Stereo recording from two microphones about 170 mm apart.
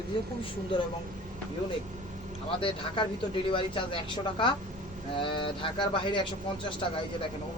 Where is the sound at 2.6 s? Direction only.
30° left (ahead or behind).